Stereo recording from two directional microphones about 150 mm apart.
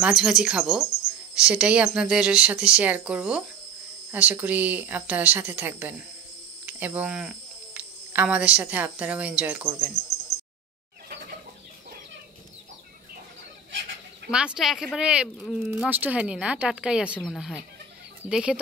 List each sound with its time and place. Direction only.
0.0 s speech: 5° right (ahead or behind)
14.3 s speech: 5° right (ahead or behind)
17.2 s speech: 5° left (ahead or behind)